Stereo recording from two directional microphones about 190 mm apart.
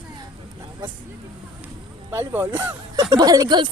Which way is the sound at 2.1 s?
10° right (ahead or behind).